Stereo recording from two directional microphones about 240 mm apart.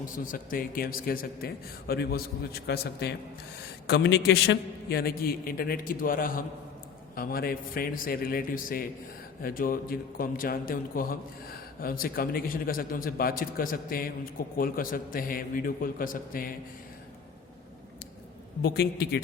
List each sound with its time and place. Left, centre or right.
0.0 s a man's voice: left
18.6 s a man's voice: left